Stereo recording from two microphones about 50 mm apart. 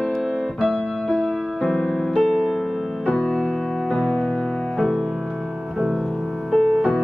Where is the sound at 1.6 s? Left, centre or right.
Centre.